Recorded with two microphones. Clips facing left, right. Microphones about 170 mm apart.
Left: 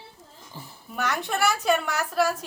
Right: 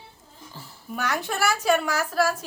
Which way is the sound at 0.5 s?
15° left (ahead or behind).